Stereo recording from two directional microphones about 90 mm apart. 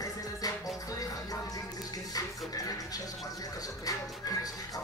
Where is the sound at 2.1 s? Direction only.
45° left (ahead or behind).